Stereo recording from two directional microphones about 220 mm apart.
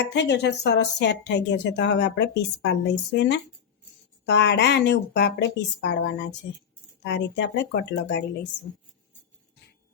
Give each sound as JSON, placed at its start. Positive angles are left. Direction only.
{"t": 0.0, "sound": "a woman's voice", "side_deg": 50}